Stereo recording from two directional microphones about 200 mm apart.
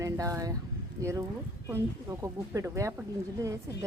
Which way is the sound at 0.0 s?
15° right (ahead or behind).